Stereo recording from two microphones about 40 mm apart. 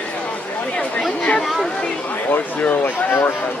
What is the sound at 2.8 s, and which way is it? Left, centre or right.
Speech, left.